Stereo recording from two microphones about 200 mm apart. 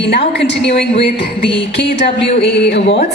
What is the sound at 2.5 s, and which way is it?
Speech, 55° left (ahead or behind).